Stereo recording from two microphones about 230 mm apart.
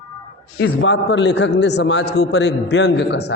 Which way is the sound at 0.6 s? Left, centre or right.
Left.